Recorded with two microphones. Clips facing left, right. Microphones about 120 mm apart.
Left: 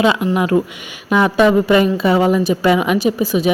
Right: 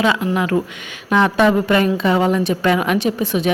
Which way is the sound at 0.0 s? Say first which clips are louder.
Left 3 dB; 20° left (ahead or behind).